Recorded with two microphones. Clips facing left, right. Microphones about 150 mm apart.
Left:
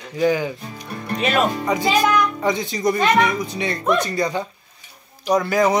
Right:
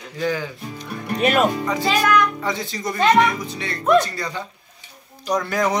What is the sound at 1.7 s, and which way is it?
Speech, 15° left (ahead or behind).